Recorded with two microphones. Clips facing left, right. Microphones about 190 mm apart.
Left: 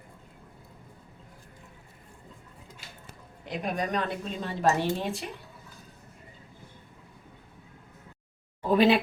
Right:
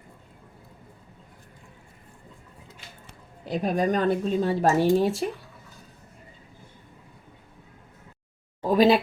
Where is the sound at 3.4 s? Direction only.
35° right (ahead or behind).